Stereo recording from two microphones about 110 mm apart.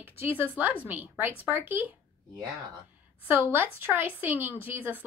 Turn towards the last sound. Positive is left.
turn(degrees=-20)  # may be behind; listen again after turning